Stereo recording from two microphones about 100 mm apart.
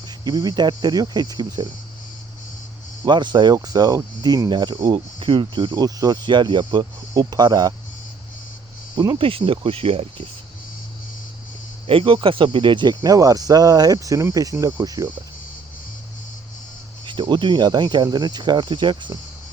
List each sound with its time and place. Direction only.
0.3 s speech: 40° right (ahead or behind)
3.1 s speech: 50° right (ahead or behind)
9.0 s speech: 55° right (ahead or behind); by 10.2 s 70° right (ahead or behind)
11.9 s speech: 65° right (ahead or behind); by 15.0 s 40° right (ahead or behind)
17.1 s speech: 50° right (ahead or behind)